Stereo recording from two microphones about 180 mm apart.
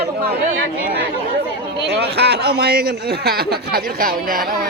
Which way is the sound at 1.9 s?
65° right (ahead or behind).